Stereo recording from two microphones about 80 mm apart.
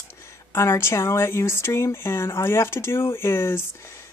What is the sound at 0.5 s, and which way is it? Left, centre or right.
Speech, left.